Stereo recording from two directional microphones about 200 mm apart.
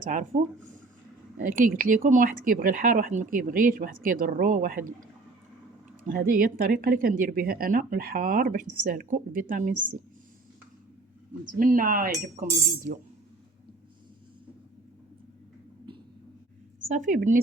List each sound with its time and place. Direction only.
0.0 s speech: 40° right (ahead or behind)
6.1 s speech: 45° right (ahead or behind)
11.4 s speech: 40° right (ahead or behind)
16.9 s speech: 40° right (ahead or behind)